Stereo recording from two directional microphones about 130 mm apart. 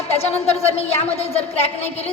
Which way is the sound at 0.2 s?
50° left (ahead or behind).